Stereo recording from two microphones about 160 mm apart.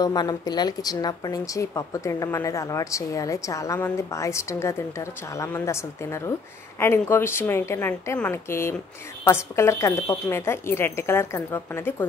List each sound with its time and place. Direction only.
0.0 s a woman's voice: 25° left (ahead or behind)